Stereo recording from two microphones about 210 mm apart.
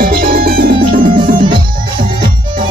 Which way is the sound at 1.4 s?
25° right (ahead or behind).